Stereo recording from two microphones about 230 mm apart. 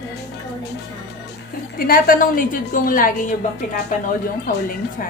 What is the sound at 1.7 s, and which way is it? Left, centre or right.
A woman's voice, left.